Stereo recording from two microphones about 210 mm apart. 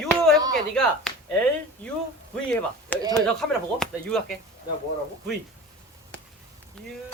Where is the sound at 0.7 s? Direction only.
5° left (ahead or behind).